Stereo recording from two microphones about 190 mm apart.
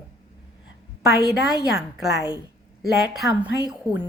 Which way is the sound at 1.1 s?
20° left (ahead or behind).